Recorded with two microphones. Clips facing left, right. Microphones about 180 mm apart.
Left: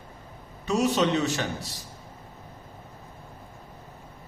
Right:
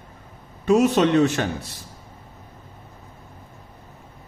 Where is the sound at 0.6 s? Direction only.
55° right (ahead or behind).